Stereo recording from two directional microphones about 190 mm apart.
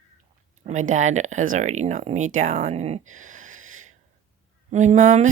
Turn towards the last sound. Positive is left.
turn(degrees=-40)  # may be behind; listen again after turning